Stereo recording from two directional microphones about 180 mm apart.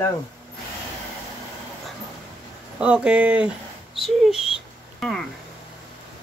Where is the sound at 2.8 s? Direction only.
5° right (ahead or behind).